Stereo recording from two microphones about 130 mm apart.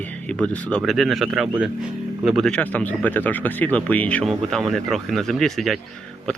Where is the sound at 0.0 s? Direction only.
10° left (ahead or behind).